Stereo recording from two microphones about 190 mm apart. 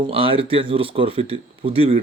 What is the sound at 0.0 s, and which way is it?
Speech, 30° right (ahead or behind).